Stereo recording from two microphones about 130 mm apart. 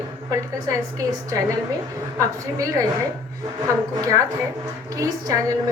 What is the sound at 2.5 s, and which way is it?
A woman's voice, 25° right (ahead or behind).